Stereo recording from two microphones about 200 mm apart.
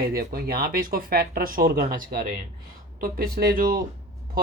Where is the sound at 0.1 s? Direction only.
50° right (ahead or behind).